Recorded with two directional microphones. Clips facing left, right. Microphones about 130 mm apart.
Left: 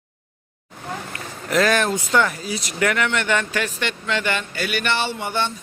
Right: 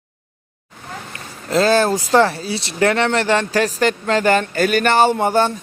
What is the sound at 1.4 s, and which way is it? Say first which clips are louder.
Speech: right 4 dB; 30° right (ahead or behind).